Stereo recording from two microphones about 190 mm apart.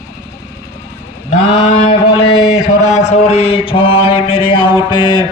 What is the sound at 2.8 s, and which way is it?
Mantra, 35° left (ahead or behind).